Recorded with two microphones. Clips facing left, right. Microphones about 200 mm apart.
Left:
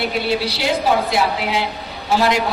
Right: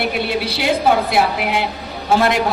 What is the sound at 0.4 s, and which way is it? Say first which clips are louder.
A man's voice: right 2 dB; 55° right (ahead or behind).